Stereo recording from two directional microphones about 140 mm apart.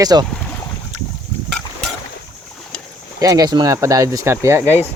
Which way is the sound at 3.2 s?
25° right (ahead or behind).